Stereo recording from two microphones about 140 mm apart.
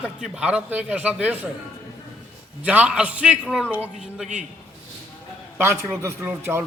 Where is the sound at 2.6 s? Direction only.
10° right (ahead or behind).